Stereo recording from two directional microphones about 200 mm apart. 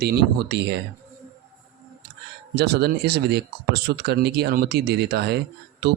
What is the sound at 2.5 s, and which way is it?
Speech, 55° right (ahead or behind).